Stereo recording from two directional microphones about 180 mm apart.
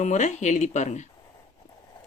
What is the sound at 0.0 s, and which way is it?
Speech, 40° left (ahead or behind).